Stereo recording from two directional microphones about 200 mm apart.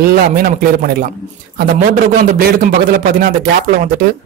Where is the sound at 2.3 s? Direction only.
45° right (ahead or behind).